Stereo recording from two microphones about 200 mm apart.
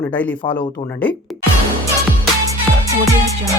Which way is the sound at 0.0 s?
10° left (ahead or behind).